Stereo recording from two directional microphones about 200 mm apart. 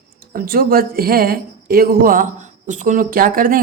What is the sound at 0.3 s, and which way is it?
A woman's voice, 50° right (ahead or behind).